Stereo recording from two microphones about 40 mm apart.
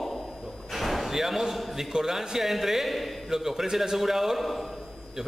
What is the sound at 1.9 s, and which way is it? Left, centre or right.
Speech, centre.